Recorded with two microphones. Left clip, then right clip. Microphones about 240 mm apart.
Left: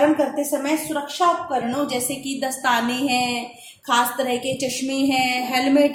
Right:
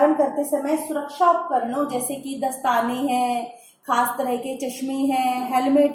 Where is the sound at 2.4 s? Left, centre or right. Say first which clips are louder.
Even; left.